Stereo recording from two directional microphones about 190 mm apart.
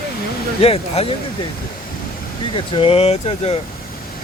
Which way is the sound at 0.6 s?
30° left (ahead or behind).